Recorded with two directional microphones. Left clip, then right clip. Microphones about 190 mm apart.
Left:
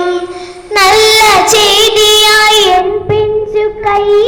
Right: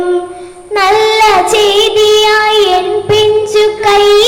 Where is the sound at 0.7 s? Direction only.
40° right (ahead or behind).